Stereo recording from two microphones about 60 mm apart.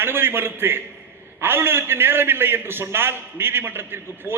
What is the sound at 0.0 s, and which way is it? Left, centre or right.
A man's voice, right.